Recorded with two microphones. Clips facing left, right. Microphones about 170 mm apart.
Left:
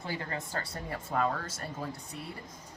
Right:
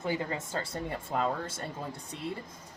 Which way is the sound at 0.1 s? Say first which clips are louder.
Right 3 dB; 20° right (ahead or behind).